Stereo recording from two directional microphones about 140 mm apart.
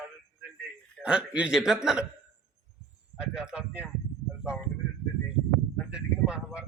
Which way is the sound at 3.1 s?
5° right (ahead or behind).